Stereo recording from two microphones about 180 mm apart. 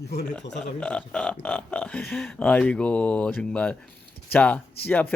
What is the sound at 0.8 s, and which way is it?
Speech, 5° left (ahead or behind).